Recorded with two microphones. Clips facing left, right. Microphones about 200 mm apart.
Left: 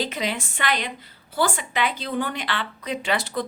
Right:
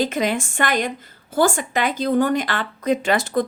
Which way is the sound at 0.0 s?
50° right (ahead or behind).